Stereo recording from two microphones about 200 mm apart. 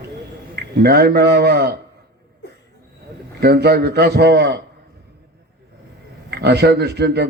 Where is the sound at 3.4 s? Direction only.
55° right (ahead or behind).